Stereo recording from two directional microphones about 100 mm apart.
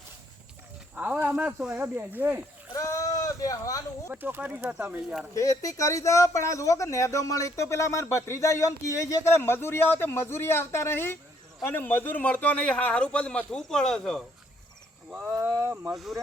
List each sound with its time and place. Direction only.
0.9 s speech: 15° right (ahead or behind)
1.8 s speech: 20° right (ahead or behind)
2.7 s speech: 35° left (ahead or behind)
4.1 s speech: 20° right (ahead or behind)
5.3 s a man's voice: 35° left (ahead or behind); by 14.2 s 5° left (ahead or behind)
15.3 s speech: 25° right (ahead or behind)
15.9 s speech: centre (ahead or behind)